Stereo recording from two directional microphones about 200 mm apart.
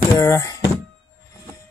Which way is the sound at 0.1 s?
15° left (ahead or behind).